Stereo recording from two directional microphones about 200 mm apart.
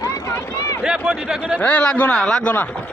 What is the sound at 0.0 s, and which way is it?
Run, 15° left (ahead or behind).